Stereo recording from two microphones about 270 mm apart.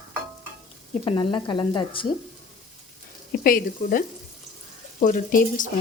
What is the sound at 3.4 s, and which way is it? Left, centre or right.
Speech, left.